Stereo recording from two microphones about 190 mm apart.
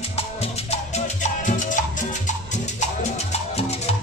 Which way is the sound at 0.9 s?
40° left (ahead or behind).